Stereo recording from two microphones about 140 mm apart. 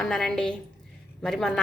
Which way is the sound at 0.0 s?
5° left (ahead or behind).